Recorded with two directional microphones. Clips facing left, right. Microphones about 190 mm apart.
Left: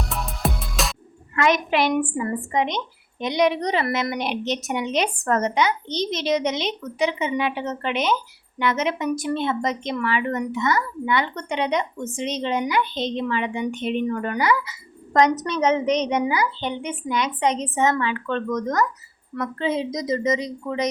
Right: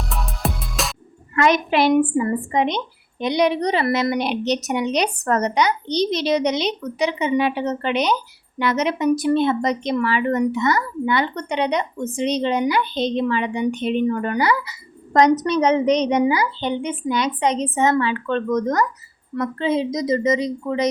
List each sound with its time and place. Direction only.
0.1 s music: centre (ahead or behind)
1.4 s speech: 35° right (ahead or behind)